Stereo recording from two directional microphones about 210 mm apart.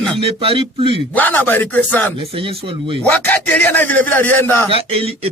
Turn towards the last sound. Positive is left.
turn(degrees=-25)  # may be behind; listen again after turning